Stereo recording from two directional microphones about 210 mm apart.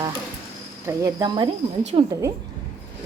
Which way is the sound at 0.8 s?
15° right (ahead or behind).